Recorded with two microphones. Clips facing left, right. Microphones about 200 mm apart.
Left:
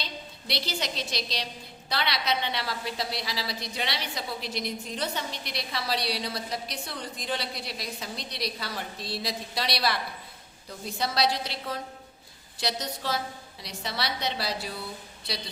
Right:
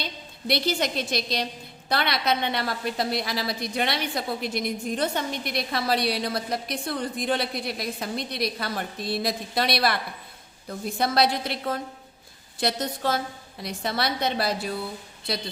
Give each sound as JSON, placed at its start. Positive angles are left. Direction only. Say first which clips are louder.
{"t": 0.0, "sound": "a woman's voice", "louder": "right 5 dB", "side_deg": -55}